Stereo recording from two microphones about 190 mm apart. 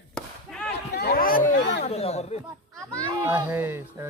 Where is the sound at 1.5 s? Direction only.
70° left (ahead or behind).